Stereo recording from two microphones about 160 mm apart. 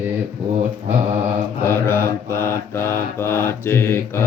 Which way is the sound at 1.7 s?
15° left (ahead or behind).